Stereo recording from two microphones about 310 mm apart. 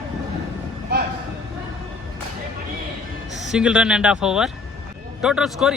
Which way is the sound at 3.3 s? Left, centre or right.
Centre.